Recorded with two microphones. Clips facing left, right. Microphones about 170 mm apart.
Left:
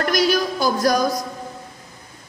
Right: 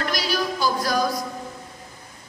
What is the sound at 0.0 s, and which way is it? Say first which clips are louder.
Music: left 6 dB; 50° left (ahead or behind).